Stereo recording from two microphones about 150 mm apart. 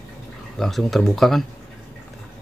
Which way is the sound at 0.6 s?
Centre (ahead or behind).